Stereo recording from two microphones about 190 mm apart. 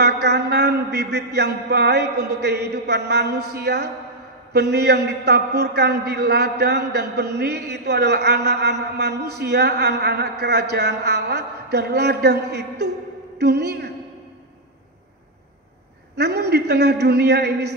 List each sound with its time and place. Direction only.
0.0 s a man's voice: 60° right (ahead or behind)
16.2 s a man's voice: 60° right (ahead or behind)